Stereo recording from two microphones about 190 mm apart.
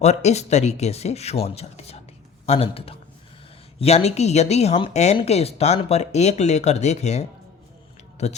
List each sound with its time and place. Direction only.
0.0 s speech: 35° left (ahead or behind)